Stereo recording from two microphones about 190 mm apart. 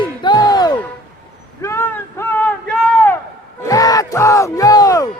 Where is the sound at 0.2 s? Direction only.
20° left (ahead or behind).